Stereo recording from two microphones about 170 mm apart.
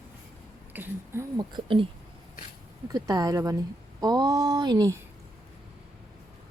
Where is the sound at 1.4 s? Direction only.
30° right (ahead or behind).